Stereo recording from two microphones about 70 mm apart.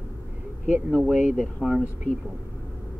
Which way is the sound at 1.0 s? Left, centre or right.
Centre.